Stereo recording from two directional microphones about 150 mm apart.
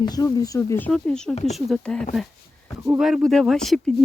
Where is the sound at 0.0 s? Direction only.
25° left (ahead or behind).